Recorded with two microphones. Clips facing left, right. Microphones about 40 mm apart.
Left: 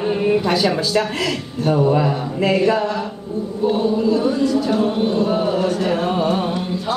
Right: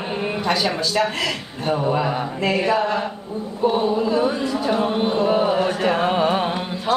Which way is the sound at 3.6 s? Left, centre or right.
Right.